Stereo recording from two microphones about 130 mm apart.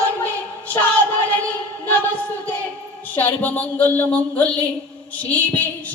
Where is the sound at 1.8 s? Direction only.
15° left (ahead or behind).